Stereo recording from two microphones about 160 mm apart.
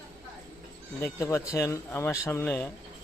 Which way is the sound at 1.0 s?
15° left (ahead or behind).